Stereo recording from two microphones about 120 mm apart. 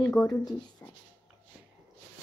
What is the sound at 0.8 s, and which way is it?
Writing, 15° left (ahead or behind).